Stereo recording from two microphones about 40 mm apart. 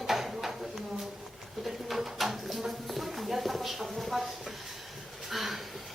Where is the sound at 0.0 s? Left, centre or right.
Centre.